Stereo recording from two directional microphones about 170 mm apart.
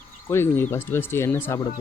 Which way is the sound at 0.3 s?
15° left (ahead or behind).